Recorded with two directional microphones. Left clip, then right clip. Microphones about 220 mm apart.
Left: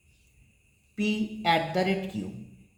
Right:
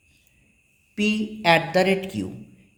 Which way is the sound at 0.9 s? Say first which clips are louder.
Right 6 dB; 40° right (ahead or behind).